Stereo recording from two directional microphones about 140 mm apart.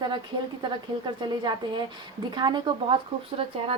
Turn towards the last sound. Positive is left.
turn(degrees=-40)  # may be behind; listen again after turning